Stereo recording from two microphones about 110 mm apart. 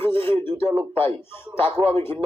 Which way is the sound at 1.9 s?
20° left (ahead or behind).